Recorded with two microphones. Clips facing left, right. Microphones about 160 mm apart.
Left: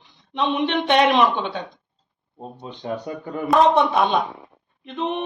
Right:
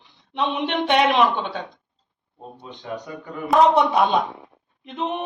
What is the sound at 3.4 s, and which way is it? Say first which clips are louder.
Speech: even; centre (ahead or behind).